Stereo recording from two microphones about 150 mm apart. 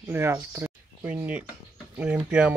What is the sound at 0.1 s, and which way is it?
Speech, 15° right (ahead or behind).